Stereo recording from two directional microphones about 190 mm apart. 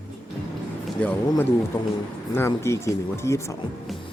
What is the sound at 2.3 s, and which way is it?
Speech, 15° left (ahead or behind).